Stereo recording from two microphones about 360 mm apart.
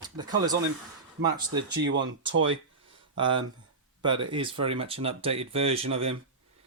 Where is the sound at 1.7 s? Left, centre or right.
Right.